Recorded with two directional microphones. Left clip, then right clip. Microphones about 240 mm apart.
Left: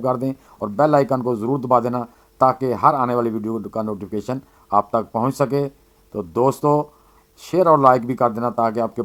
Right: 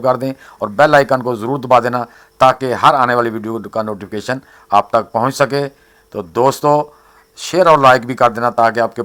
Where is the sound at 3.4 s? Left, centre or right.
Right.